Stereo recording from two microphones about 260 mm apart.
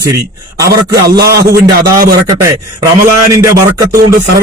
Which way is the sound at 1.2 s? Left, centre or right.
Right.